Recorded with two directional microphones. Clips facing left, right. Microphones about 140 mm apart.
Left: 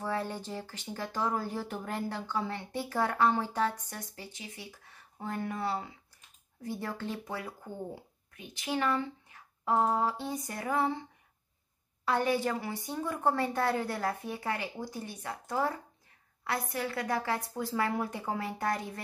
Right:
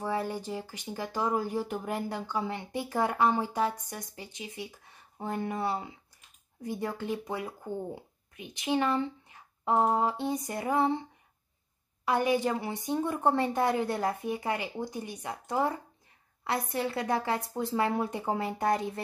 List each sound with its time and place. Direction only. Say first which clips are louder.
0.0 s speech: right 2 dB; 10° right (ahead or behind)
12.0 s speech: right 2 dB; 15° right (ahead or behind)